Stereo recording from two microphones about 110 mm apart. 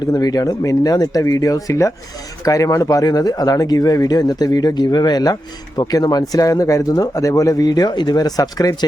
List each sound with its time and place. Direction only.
0.0 s speech: 35° left (ahead or behind)